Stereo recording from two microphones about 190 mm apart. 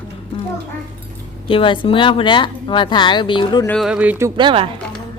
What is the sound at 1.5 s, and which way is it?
Speech, 25° left (ahead or behind).